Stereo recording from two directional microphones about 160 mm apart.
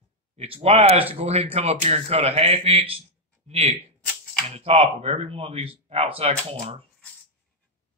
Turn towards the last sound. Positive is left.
turn(degrees=-40)  # may be behind; listen again after turning